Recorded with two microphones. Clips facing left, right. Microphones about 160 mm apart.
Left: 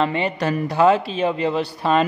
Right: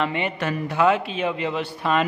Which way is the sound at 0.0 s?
35° left (ahead or behind).